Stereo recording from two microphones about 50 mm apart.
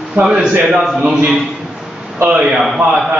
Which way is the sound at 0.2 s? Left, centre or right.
Centre.